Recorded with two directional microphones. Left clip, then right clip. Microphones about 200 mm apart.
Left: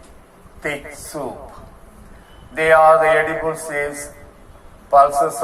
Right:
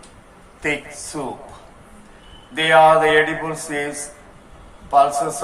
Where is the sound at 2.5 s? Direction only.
55° left (ahead or behind).